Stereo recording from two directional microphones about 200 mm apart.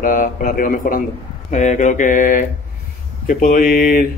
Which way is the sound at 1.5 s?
35° left (ahead or behind).